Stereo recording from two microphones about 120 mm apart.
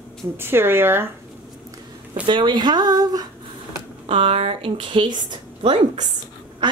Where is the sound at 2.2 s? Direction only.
40° right (ahead or behind).